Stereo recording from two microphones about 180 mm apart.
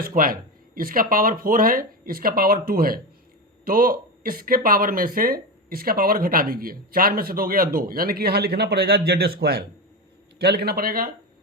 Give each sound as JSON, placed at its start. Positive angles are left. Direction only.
{"t": 0.0, "sound": "speech", "side_deg": -55}